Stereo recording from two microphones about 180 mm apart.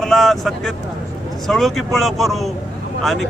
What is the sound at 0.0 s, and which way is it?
Speech, centre (ahead or behind).